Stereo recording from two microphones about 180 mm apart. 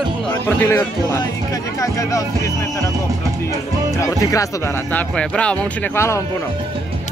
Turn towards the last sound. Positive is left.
turn(degrees=15)  # may be behind; listen again after turning